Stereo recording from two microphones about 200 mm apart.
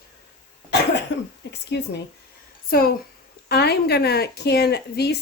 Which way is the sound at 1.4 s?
60° left (ahead or behind).